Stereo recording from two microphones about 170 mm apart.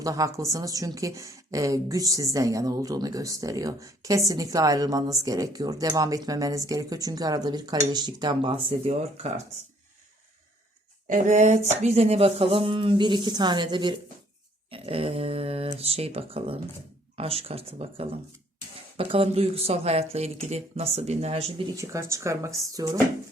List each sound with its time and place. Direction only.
0.0 s a woman's voice: 20° right (ahead or behind); by 9.3 s 35° right (ahead or behind)
11.1 s speech: 45° right (ahead or behind); by 13.9 s 25° right (ahead or behind)
14.7 s a sound: 35° right (ahead or behind)
15.8 s speech: 35° right (ahead or behind)
21.7 s a woman's voice: 20° right (ahead or behind)